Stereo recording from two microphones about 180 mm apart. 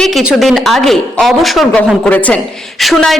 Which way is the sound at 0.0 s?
Centre (ahead or behind).